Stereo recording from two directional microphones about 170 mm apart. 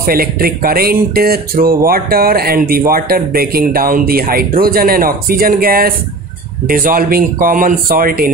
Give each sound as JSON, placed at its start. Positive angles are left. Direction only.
{"t": 0.0, "sound": "speech", "side_deg": -60}